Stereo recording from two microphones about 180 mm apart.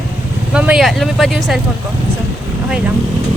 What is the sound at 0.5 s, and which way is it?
Speech, 5° right (ahead or behind).